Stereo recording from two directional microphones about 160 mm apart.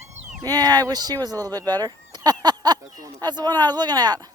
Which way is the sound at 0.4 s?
25° right (ahead or behind).